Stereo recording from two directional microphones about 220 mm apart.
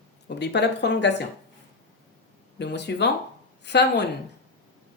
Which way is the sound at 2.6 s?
50° left (ahead or behind).